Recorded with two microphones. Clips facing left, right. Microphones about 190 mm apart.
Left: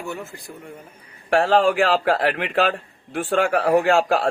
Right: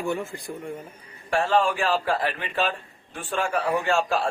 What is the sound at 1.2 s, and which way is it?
A man's voice, 75° left (ahead or behind).